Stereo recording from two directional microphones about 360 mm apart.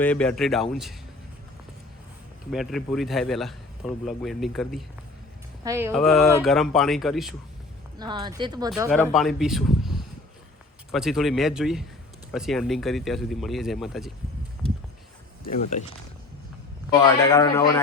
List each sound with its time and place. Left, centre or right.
0.0 s a man's voice: centre
2.5 s a man's voice: centre
7.9 s a man's voice: centre
15.4 s speech: left
16.9 s speech: centre